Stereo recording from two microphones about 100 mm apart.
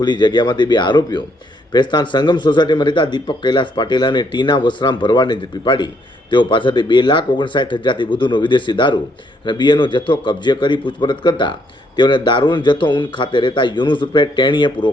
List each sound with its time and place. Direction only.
0.0 s speech: 50° left (ahead or behind)